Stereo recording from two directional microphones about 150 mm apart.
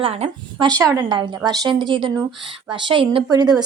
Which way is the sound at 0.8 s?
15° right (ahead or behind).